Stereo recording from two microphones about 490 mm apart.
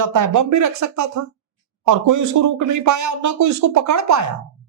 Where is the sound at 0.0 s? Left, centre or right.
Right.